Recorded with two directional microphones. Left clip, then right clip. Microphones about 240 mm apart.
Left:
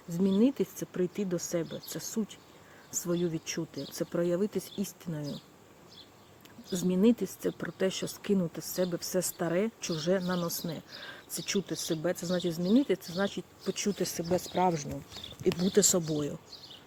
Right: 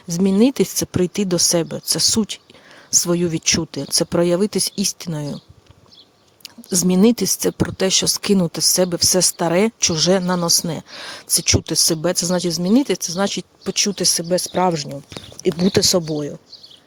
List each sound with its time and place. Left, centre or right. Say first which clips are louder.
0.1 s speech: right 11 dB; right
6.7 s speech: right 11 dB; right